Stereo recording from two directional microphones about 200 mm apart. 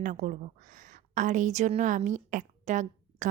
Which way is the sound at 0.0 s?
40° right (ahead or behind).